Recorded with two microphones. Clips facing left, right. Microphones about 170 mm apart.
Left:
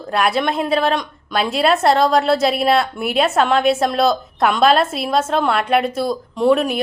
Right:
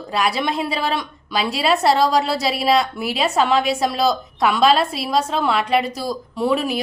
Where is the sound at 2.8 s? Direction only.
55° left (ahead or behind).